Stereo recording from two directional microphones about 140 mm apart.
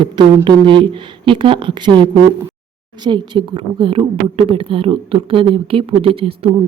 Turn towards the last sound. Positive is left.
turn(degrees=-40)  # may be behind; listen again after turning